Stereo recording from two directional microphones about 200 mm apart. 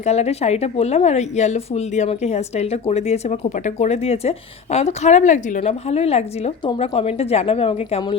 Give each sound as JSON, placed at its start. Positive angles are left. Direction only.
{"t": 0.0, "sound": "a woman's voice", "side_deg": 35}